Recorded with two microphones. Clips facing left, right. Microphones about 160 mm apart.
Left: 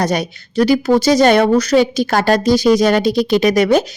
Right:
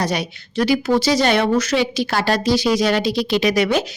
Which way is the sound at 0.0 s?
45° left (ahead or behind).